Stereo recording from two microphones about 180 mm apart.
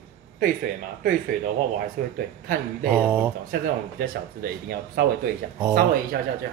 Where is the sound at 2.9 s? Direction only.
10° right (ahead or behind).